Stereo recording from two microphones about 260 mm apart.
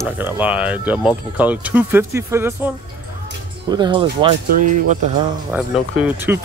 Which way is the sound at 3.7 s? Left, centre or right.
Centre.